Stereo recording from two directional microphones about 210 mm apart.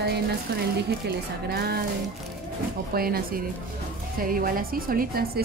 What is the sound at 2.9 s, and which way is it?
A woman's voice, 45° right (ahead or behind).